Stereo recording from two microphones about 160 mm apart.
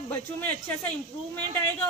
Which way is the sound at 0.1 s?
10° left (ahead or behind).